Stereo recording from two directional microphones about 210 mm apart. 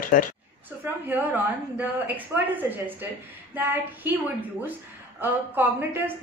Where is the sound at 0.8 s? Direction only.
10° right (ahead or behind).